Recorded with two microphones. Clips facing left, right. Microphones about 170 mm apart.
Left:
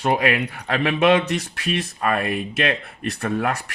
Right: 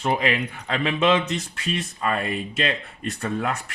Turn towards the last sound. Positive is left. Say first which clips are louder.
# left 3 dB
turn(degrees=70)  # may be behind; listen again after turning